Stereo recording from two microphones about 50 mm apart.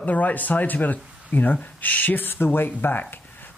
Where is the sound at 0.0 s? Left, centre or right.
Left.